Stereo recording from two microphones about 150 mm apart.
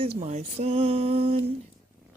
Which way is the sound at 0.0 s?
45° right (ahead or behind).